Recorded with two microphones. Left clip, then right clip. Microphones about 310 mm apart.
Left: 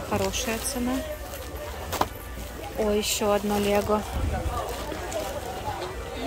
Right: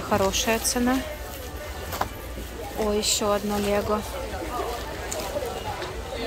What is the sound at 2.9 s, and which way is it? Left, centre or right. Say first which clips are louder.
Speech: right 1 dB; centre.